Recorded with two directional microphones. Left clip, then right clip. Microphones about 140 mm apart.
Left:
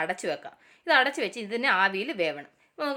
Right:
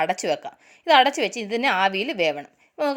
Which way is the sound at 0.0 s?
45° right (ahead or behind).